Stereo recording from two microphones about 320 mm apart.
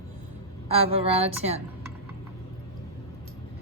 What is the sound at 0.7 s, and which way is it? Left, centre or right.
Speech, centre.